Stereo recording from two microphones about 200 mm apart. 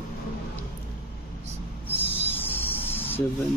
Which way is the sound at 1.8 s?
10° left (ahead or behind).